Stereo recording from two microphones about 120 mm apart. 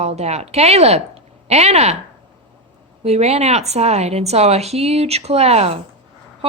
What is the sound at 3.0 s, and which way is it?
A woman's voice, 60° right (ahead or behind).